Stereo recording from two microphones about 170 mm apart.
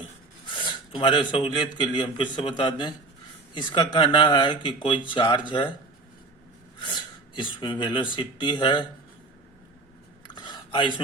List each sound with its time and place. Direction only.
0.5 s speech: 30° left (ahead or behind)
6.7 s speech: 25° left (ahead or behind)
10.2 s a sound: 25° left (ahead or behind)